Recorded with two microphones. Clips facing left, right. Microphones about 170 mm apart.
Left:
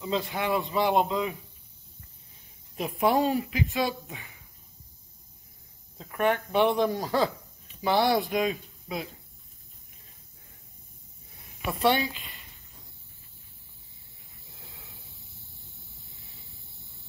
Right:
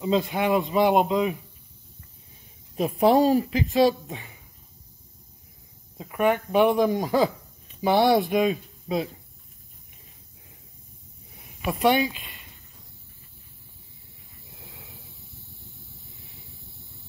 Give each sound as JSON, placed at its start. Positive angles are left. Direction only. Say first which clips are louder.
{"t": 0.0, "sound": "a man's voice", "louder": "right 6 dB", "side_deg": -20}
{"t": 2.7, "sound": "speech", "louder": "right 5 dB", "side_deg": -25}
{"t": 3.1, "sound": "speech", "louder": "right 6 dB", "side_deg": -40}
{"t": 5.9, "sound": "speech", "louder": "right 3 dB", "side_deg": -10}
{"t": 11.6, "sound": "speech", "louder": "right 4 dB", "side_deg": -15}